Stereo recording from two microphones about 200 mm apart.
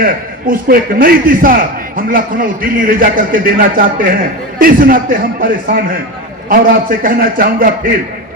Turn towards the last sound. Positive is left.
turn(degrees=-45)  # may be behind; listen again after turning